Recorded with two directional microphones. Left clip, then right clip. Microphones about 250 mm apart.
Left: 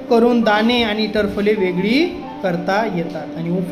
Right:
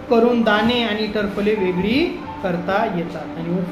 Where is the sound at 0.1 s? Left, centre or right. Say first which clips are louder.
Left 2 dB; left.